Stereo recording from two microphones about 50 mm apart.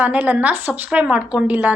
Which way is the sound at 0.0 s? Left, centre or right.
Right.